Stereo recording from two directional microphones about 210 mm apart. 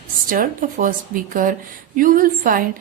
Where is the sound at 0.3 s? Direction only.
40° right (ahead or behind).